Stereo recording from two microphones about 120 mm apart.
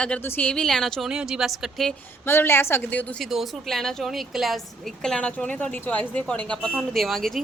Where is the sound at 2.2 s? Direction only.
20° left (ahead or behind).